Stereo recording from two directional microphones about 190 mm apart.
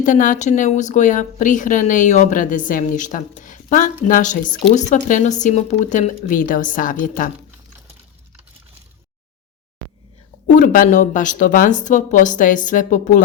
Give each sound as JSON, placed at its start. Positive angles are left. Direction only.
{"t": 0.0, "sound": "speech", "side_deg": 45}
{"t": 10.4, "sound": "speech", "side_deg": 40}